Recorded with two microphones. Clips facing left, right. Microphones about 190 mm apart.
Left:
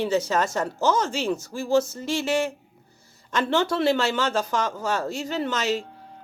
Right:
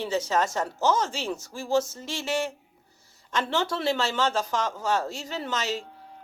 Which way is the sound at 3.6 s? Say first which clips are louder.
Left 5 dB; 60° left (ahead or behind).